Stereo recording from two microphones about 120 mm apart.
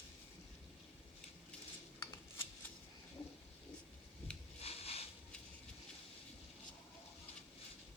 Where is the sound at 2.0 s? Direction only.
20° left (ahead or behind).